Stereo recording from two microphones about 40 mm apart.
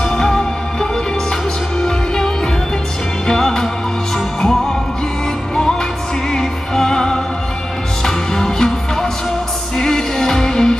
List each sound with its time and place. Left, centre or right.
0.1 s music: centre
6.3 s music: centre
9.8 s music: centre